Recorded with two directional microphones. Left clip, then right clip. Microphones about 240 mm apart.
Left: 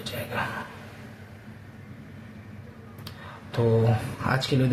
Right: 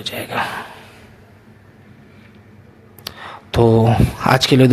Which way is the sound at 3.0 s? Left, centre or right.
Right.